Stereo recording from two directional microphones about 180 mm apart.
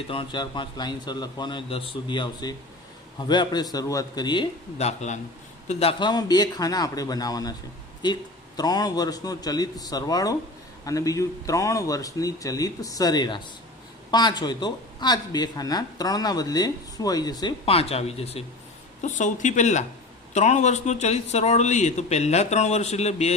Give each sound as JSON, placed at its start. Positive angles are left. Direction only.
{"t": 0.1, "sound": "speech", "side_deg": 25}
{"t": 4.8, "sound": "a man's voice", "side_deg": 35}
{"t": 17.7, "sound": "a man's voice", "side_deg": 35}